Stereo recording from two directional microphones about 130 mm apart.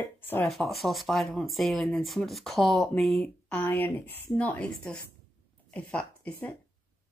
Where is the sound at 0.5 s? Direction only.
Centre (ahead or behind).